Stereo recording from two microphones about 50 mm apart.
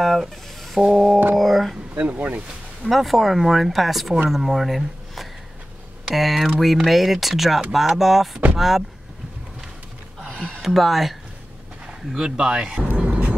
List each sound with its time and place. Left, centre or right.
0.0 s a sound: centre
0.7 s speech: centre
2.0 s speech: right
2.8 s speech: centre
10.3 s a sound: centre
10.6 s speech: centre
11.8 s speech: centre
12.9 s vehicle: right